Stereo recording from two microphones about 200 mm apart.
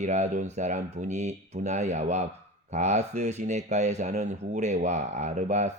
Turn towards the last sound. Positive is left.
turn(degrees=-35)  # may be behind; listen again after turning